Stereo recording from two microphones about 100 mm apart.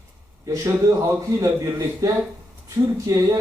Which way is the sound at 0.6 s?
30° right (ahead or behind).